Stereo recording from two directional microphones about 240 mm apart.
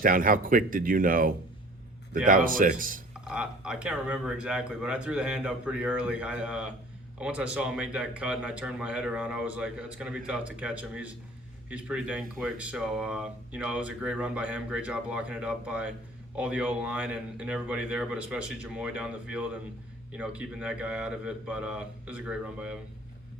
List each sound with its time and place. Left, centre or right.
0.0 s speech: right
3.2 s speech: centre